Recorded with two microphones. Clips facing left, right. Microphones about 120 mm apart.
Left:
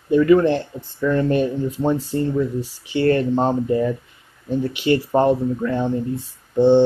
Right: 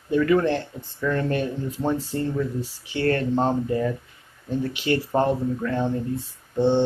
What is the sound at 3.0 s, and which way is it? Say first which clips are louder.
Speech: left 5 dB; 20° left (ahead or behind).